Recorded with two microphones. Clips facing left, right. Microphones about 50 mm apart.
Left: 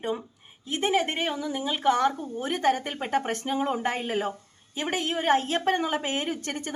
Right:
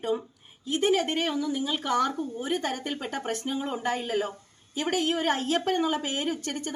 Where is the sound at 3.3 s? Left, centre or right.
Left.